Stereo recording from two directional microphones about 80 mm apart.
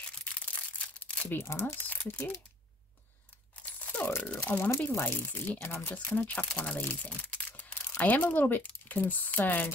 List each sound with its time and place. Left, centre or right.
0.2 s crumpling: centre
1.5 s speech: left
1.9 s crumpling: left
4.2 s speech: centre
7.1 s crumpling: centre
8.0 s speech: centre